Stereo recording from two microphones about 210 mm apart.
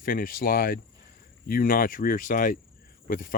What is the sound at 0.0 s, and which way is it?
Speech, 40° left (ahead or behind).